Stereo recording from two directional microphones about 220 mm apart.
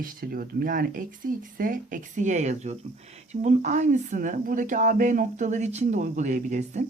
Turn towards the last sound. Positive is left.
turn(degrees=-30)  # may be behind; listen again after turning